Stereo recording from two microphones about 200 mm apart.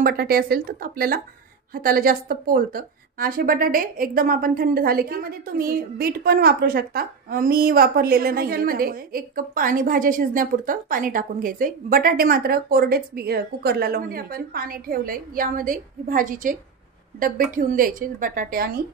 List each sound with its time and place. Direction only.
0.0 s a woman's voice: 50° right (ahead or behind)